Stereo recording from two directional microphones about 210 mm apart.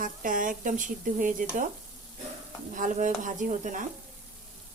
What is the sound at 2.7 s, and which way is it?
Speech, 40° right (ahead or behind).